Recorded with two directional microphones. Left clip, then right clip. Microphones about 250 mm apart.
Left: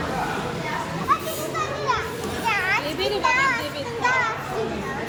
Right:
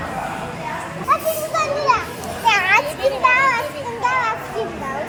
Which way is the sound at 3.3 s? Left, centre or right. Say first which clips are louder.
Right 5 dB; right.